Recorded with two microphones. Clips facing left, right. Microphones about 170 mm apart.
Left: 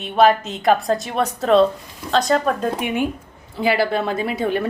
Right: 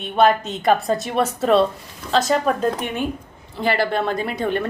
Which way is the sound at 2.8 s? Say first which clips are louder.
Left 3 dB; 10° left (ahead or behind).